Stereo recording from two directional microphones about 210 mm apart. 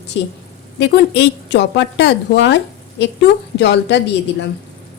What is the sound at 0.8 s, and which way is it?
A woman's voice, 50° left (ahead or behind).